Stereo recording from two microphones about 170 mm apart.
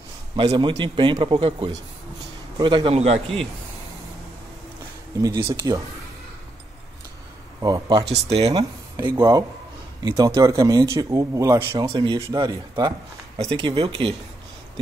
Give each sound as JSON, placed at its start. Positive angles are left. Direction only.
{"t": 0.4, "sound": "a man's voice", "side_deg": -25}
{"t": 5.2, "sound": "speech", "side_deg": -20}
{"t": 7.6, "sound": "speech", "side_deg": -25}
{"t": 8.1, "sound": "a man's voice", "side_deg": -35}
{"t": 8.5, "sound": "a man's voice", "side_deg": -25}